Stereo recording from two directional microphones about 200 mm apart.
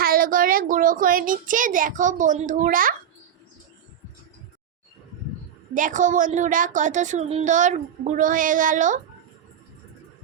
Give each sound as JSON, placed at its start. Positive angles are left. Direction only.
{"t": 0.0, "sound": "a child's voice", "side_deg": -45}
{"t": 5.7, "sound": "a woman's voice", "side_deg": -40}